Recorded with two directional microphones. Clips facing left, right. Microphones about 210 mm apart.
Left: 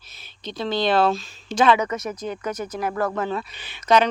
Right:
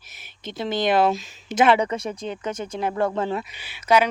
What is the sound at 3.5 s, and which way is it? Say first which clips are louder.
Speech: left 1 dB; 10° right (ahead or behind).